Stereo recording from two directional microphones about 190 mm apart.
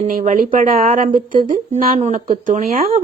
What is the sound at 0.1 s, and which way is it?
A woman's voice, 45° right (ahead or behind).